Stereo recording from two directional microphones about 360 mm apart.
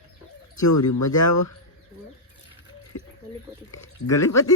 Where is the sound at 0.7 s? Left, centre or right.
Left.